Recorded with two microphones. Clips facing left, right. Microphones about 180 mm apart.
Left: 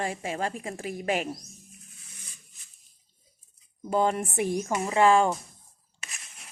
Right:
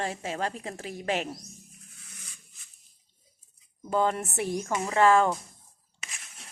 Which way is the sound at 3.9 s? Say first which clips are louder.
Left 1 dB; 15° left (ahead or behind).